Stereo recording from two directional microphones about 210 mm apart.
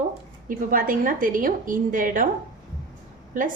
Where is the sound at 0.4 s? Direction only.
40° right (ahead or behind).